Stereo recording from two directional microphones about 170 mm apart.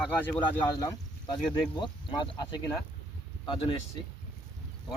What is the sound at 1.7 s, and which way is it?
Speech, 30° left (ahead or behind).